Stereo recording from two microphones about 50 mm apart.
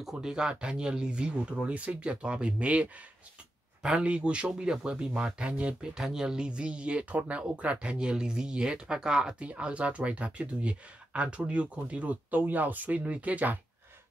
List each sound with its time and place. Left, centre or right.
0.0 s speech: centre
9.4 s speech: right